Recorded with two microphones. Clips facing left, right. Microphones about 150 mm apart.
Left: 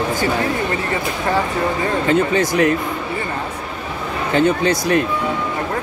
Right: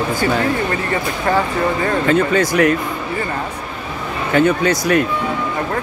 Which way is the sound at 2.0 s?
20° left (ahead or behind).